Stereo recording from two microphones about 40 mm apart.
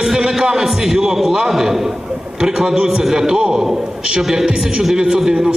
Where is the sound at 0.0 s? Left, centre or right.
Centre.